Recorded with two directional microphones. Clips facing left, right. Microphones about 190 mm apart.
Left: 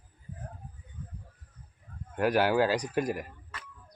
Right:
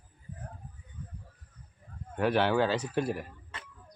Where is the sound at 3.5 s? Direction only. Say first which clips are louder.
Even; 25° right (ahead or behind).